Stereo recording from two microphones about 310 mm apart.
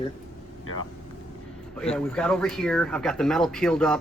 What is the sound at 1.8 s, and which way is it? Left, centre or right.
Speech, centre.